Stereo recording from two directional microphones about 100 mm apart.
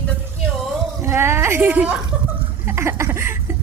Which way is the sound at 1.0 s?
25° right (ahead or behind).